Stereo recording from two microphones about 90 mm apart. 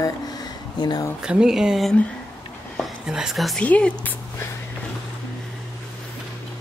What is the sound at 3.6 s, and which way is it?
Speech, 15° left (ahead or behind).